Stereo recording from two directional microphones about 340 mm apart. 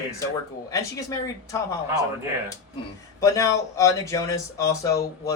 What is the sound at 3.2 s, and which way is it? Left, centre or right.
Speech, centre.